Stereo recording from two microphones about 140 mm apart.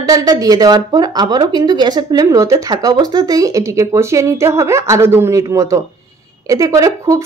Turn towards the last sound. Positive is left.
turn(degrees=-25)  # may be behind; listen again after turning